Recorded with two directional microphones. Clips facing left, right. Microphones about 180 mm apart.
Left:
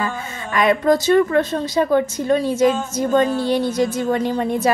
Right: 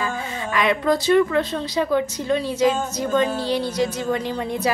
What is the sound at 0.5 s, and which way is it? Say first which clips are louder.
Speech: left 4 dB; 45° left (ahead or behind).